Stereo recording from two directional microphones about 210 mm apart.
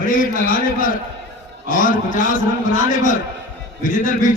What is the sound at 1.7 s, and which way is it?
Speech, 40° left (ahead or behind).